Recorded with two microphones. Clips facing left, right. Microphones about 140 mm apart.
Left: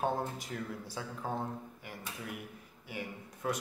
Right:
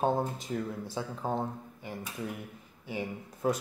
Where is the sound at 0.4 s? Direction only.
25° right (ahead or behind).